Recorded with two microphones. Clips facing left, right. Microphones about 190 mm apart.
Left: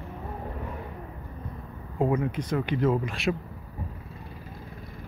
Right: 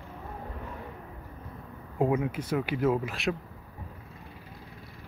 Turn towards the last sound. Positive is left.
turn(degrees=0)  # may be behind; listen again after turning